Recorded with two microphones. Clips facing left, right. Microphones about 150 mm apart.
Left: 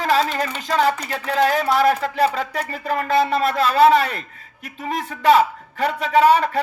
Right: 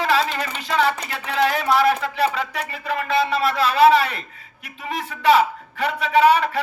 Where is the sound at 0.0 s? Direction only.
40° left (ahead or behind).